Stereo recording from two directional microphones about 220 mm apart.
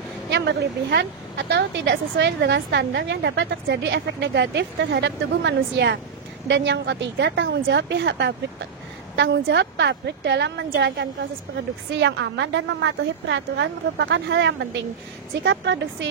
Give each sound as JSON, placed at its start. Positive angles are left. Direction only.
{"t": 0.3, "sound": "a woman's voice", "side_deg": -50}